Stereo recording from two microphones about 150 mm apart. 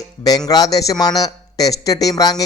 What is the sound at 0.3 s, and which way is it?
Speech, 25° left (ahead or behind).